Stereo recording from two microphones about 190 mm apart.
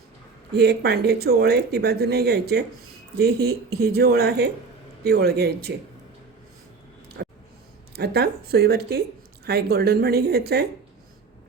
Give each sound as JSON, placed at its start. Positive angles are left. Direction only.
{"t": 0.5, "sound": "speech", "side_deg": -60}
{"t": 7.2, "sound": "a sound", "side_deg": -60}
{"t": 7.9, "sound": "speech", "side_deg": -60}